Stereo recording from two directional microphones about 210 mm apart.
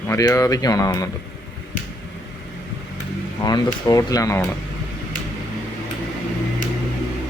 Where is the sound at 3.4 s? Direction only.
20° left (ahead or behind).